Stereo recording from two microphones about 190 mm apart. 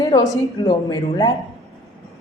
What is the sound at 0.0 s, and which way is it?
Speech, 20° left (ahead or behind).